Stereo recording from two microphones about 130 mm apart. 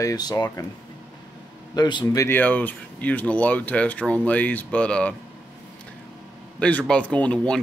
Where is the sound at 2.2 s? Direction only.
15° left (ahead or behind).